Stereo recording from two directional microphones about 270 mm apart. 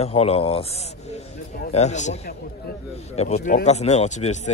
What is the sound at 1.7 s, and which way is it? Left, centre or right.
Speech, left.